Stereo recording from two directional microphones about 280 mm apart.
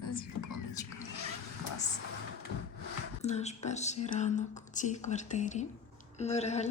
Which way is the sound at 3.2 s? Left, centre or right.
Left.